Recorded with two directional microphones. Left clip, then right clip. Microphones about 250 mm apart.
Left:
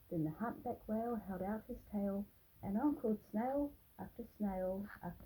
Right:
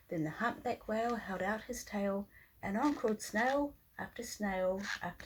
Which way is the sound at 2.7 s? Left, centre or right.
Right.